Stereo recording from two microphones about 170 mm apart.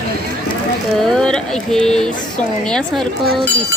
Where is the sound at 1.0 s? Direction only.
5° left (ahead or behind).